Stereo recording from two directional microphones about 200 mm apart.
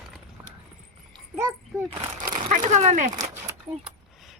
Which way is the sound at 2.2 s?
40° right (ahead or behind).